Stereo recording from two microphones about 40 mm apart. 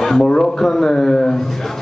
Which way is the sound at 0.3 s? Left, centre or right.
Centre.